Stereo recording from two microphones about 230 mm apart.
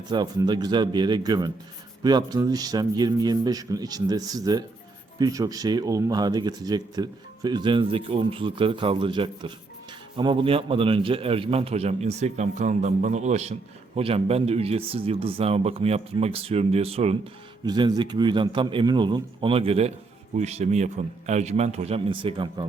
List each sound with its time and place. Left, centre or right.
0.1 s a man's voice: centre